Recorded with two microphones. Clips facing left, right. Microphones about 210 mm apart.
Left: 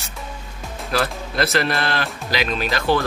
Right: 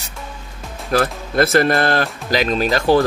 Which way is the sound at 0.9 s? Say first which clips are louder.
Right 5 dB; 50° right (ahead or behind).